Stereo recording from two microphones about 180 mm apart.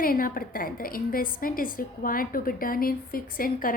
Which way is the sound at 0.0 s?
50° left (ahead or behind).